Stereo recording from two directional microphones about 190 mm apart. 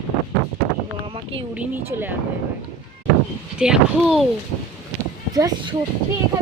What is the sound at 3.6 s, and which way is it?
Speech, centre (ahead or behind).